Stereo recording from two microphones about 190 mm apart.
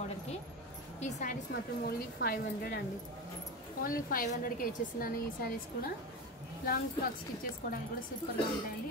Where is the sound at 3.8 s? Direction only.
50° left (ahead or behind).